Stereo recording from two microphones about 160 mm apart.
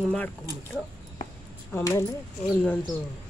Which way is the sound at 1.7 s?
20° left (ahead or behind).